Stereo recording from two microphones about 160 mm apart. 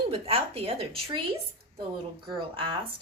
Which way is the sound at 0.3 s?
35° right (ahead or behind).